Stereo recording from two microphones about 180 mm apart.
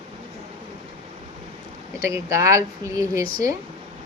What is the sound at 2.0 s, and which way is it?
A woman's voice, 15° right (ahead or behind).